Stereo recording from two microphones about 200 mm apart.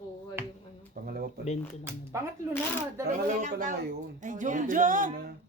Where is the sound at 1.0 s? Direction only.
50° right (ahead or behind).